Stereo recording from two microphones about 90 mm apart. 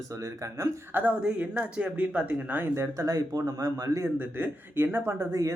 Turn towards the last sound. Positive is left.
turn(degrees=-35)  # may be behind; listen again after turning